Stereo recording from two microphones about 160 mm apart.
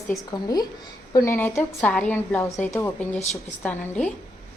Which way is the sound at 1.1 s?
15° left (ahead or behind).